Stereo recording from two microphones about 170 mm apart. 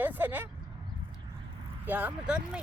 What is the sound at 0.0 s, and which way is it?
Speech, 10° right (ahead or behind).